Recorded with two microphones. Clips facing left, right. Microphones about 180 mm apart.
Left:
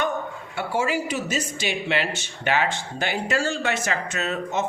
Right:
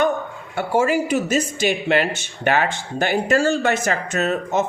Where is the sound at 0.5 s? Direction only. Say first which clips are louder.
Right 6 dB; 45° right (ahead or behind).